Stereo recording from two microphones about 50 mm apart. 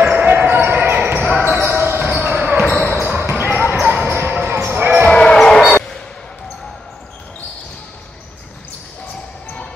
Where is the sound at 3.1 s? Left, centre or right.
Right.